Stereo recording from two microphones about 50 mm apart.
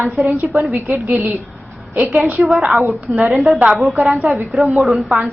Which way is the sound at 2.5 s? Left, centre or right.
Centre.